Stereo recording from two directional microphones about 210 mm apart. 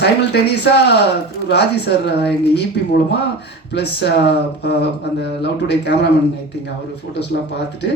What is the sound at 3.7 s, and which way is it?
Speech, 50° left (ahead or behind).